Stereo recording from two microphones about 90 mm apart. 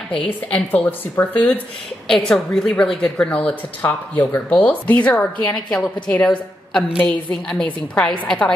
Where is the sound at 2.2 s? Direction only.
5° left (ahead or behind).